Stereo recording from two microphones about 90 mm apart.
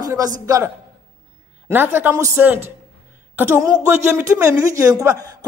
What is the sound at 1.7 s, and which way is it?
Speech, 20° right (ahead or behind).